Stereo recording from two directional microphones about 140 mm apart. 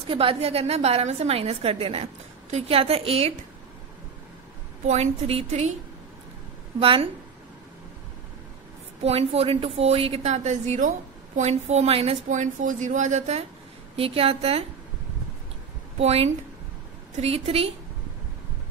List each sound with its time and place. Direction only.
0.1 s a woman's voice: 40° right (ahead or behind)
4.8 s a woman's voice: 55° right (ahead or behind)
6.8 s a woman's voice: 40° right (ahead or behind)
9.0 s a woman's voice: 45° right (ahead or behind)
12.3 s a woman's voice: 65° right (ahead or behind)
13.9 s a woman's voice: 45° right (ahead or behind)
16.0 s a woman's voice: 45° right (ahead or behind)